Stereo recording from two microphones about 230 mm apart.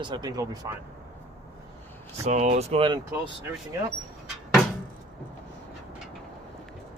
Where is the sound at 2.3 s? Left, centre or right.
Right.